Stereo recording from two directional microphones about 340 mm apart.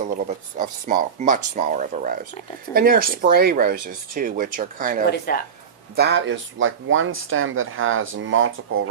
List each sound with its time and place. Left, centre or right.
0.0 s speech: right
5.1 s speech: left
6.0 s speech: right